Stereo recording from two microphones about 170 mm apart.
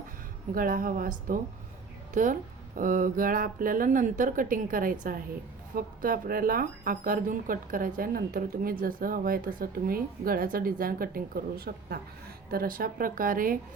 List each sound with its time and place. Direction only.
0.5 s a woman's voice: 55° right (ahead or behind)